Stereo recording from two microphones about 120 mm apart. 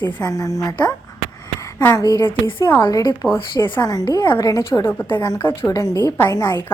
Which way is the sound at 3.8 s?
30° left (ahead or behind).